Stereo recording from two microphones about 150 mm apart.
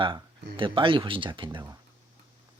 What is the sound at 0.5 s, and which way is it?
Speech, 35° right (ahead or behind).